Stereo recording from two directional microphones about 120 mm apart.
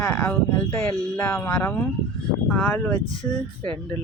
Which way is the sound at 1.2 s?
20° left (ahead or behind).